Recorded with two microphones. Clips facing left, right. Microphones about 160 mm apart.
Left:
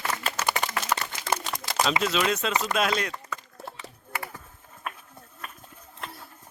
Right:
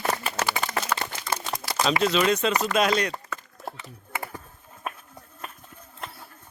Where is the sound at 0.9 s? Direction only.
15° left (ahead or behind).